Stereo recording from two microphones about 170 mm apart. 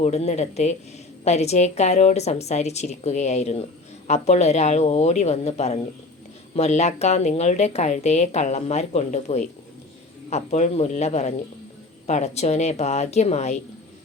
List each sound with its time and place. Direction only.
0.0 s speech: 40° left (ahead or behind)